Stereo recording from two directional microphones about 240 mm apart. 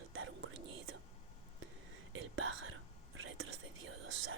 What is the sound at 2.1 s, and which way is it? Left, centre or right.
Speech, right.